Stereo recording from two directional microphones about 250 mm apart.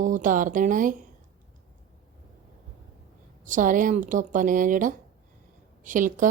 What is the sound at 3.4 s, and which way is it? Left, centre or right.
Speech, right.